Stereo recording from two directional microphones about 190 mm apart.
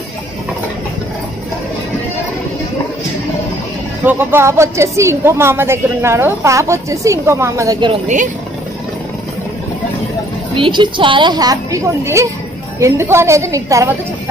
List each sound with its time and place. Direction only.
4.0 s speech: 10° right (ahead or behind)
7.9 s speech: 40° right (ahead or behind)
10.5 s a woman's voice: 25° right (ahead or behind)